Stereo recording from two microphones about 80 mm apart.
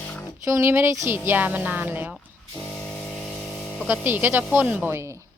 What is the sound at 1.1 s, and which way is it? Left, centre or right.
A woman's voice, right.